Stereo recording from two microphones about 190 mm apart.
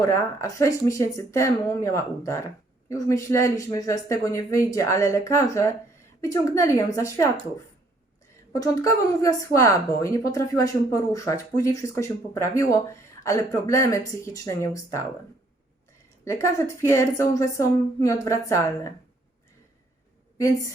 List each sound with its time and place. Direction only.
0.0 s speech: 15° left (ahead or behind)
8.5 s speech: 15° left (ahead or behind)
16.2 s speech: 15° left (ahead or behind)